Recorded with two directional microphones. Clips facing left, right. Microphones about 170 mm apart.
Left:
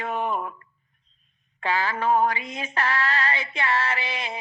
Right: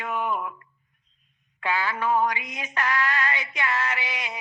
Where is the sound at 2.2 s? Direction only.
30° left (ahead or behind).